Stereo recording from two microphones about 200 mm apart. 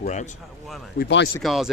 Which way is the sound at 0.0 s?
35° left (ahead or behind).